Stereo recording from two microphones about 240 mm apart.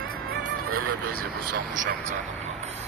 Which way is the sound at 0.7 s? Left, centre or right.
Right.